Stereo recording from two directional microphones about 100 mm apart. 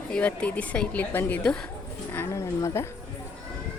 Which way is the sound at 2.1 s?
25° left (ahead or behind).